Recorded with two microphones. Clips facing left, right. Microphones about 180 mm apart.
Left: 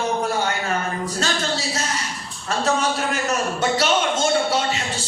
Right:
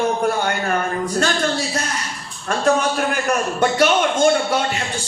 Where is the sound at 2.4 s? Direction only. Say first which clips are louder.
Right 4 dB; 55° right (ahead or behind).